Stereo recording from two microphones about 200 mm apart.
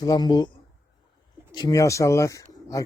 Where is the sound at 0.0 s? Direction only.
20° left (ahead or behind).